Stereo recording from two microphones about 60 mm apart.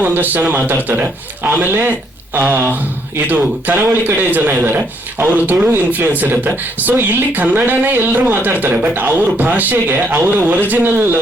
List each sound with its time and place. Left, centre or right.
0.0 s a man's voice: right